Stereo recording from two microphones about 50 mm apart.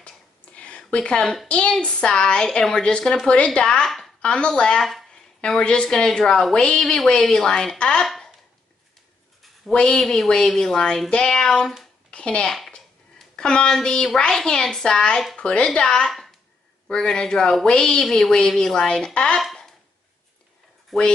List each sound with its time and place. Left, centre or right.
0.0 s a sound: left
1.2 s a woman's voice: centre
1.5 s speech: left
3.8 s a woman's voice: centre
4.2 s speech: centre
9.7 s speech: centre
10.0 s a woman's voice: centre
18.0 s speech: centre
20.9 s a woman's voice: centre